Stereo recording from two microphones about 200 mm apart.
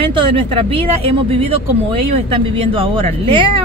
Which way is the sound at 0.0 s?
25° right (ahead or behind).